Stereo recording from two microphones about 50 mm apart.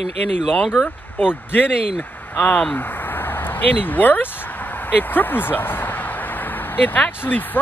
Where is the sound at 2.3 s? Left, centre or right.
Left.